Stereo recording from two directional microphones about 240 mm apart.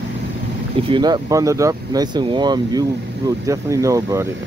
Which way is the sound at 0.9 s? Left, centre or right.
Centre.